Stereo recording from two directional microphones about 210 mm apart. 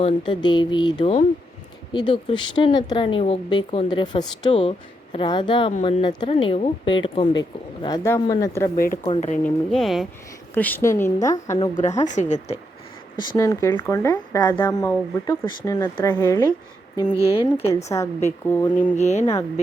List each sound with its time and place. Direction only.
0.0 s speech: 20° left (ahead or behind)
8.7 s speech: 45° left (ahead or behind)
9.4 s a woman's voice: centre (ahead or behind)
11.8 s speech: 35° left (ahead or behind)
13.1 s a woman's voice: 15° left (ahead or behind)
17.2 s speech: 25° left (ahead or behind)
17.8 s a woman's voice: 15° left (ahead or behind)
18.9 s speech: 35° left (ahead or behind)